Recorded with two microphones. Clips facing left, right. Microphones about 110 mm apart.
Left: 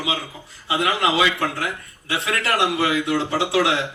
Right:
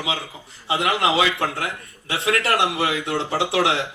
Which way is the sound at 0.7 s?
25° right (ahead or behind).